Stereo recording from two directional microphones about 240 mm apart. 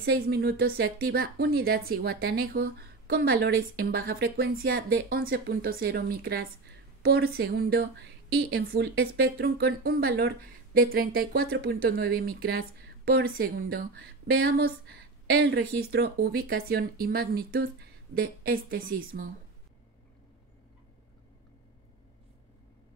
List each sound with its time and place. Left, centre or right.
0.0 s a woman's voice: right